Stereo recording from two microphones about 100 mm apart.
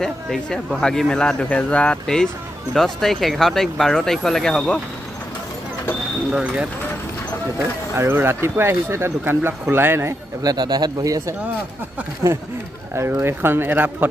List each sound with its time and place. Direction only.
0.0 s speech: 5° left (ahead or behind)
6.3 s speech: 10° right (ahead or behind)
7.9 s speech: 25° right (ahead or behind)
10.4 s a man's voice: 45° right (ahead or behind)
12.2 s speech: 30° right (ahead or behind)